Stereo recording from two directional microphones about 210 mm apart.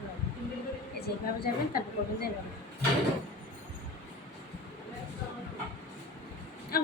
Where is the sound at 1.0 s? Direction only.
45° left (ahead or behind).